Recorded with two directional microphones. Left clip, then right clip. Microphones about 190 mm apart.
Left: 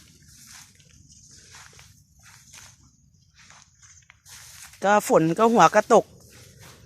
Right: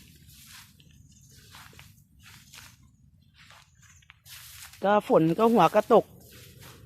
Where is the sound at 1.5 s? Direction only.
40° left (ahead or behind).